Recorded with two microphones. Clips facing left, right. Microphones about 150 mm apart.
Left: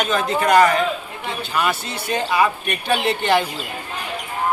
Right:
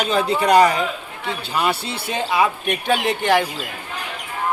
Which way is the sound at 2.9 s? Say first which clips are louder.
Even; 10° right (ahead or behind).